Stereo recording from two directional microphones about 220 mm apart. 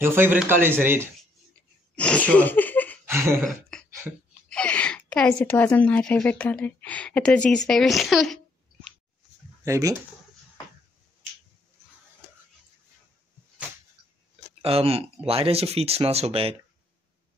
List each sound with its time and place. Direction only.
0.0 s speech: 10° right (ahead or behind)
2.0 s speech: 5° left (ahead or behind)
3.1 s a sound: 10° right (ahead or behind)
4.5 s a woman's voice: 5° left (ahead or behind)
9.7 s speech: 15° right (ahead or behind)
14.6 s speech: 25° right (ahead or behind)